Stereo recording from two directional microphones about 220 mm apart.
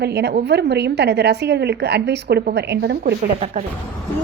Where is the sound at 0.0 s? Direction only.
50° right (ahead or behind).